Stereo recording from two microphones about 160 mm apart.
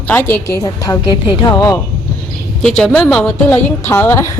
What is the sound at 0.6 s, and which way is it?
Speech, 25° left (ahead or behind).